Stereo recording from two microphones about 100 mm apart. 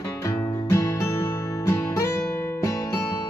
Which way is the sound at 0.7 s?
25° left (ahead or behind).